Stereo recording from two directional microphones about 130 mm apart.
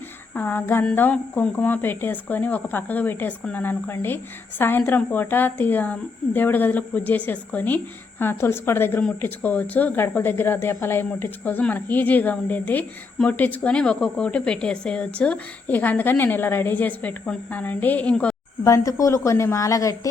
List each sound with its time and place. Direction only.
0.3 s speech: 15° left (ahead or behind)
18.6 s a woman's voice: 25° left (ahead or behind)